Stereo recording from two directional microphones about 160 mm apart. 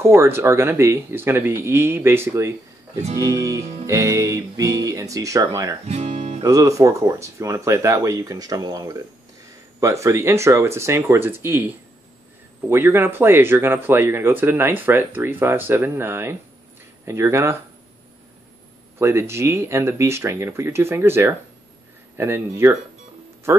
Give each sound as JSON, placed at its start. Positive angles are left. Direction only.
{"t": 0.0, "sound": "speech", "side_deg": -15}
{"t": 5.9, "sound": "speech", "side_deg": -45}
{"t": 6.4, "sound": "speech", "side_deg": -20}
{"t": 18.9, "sound": "speech", "side_deg": -15}